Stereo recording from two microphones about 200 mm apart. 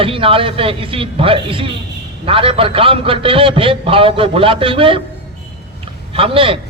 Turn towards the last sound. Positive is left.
turn(degrees=-25)  # may be behind; listen again after turning